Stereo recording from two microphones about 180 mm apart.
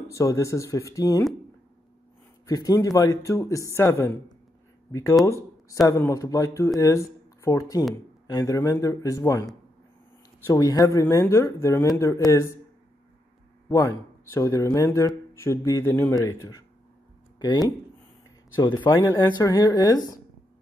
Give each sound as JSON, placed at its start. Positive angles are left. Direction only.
{"t": 0.1, "sound": "speech", "side_deg": 15}
{"t": 2.4, "sound": "speech", "side_deg": 20}
{"t": 5.2, "sound": "speech", "side_deg": 15}
{"t": 14.3, "sound": "speech", "side_deg": 15}
{"t": 18.9, "sound": "speech", "side_deg": 20}